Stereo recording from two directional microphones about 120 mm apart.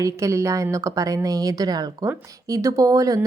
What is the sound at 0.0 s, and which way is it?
A woman's voice, 25° right (ahead or behind).